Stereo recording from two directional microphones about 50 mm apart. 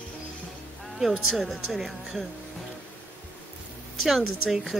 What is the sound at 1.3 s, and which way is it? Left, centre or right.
Speech, centre.